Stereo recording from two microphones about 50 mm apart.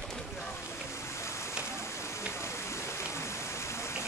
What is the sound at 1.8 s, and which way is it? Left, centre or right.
Fire, left.